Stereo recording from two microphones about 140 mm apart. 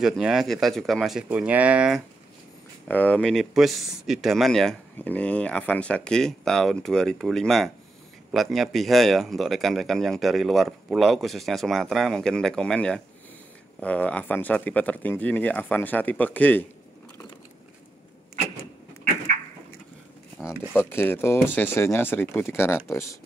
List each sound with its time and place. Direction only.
0.0 s speech: 5° right (ahead or behind)
2.9 s speech: 10° left (ahead or behind)
20.9 s speech: 15° left (ahead or behind)